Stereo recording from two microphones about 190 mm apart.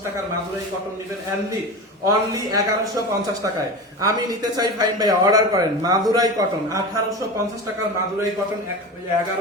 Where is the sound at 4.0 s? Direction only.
20° right (ahead or behind).